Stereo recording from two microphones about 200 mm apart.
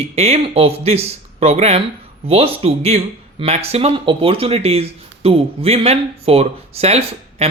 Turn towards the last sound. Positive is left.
turn(degrees=-30)  # may be behind; listen again after turning